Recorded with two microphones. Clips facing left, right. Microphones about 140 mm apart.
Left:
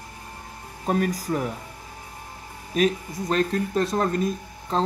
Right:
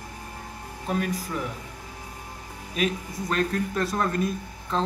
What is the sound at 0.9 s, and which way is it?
Speech, 40° left (ahead or behind).